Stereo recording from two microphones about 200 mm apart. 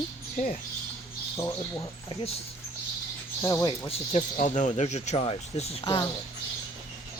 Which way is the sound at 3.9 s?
30° left (ahead or behind).